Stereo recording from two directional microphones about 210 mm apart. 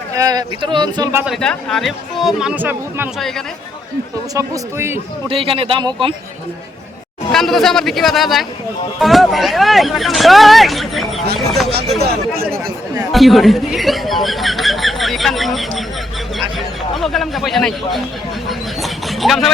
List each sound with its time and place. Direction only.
0.1 s speech: 15° right (ahead or behind)
1.2 s speech: centre (ahead or behind)
3.2 s speech: centre (ahead or behind)
4.4 s speech: 15° right (ahead or behind)
5.3 s speech: 25° right (ahead or behind)
7.3 s speech: centre (ahead or behind)
11.9 s speech: 50° right (ahead or behind)
13.1 s a sound: centre (ahead or behind)